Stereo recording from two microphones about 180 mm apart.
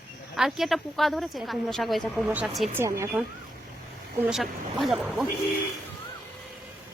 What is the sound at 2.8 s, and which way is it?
Speech, 15° right (ahead or behind).